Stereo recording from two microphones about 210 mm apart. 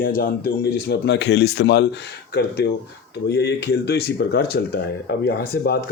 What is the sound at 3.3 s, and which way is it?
Speech, 55° left (ahead or behind).